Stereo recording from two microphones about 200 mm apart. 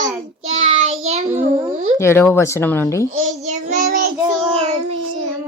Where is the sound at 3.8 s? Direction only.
40° right (ahead or behind).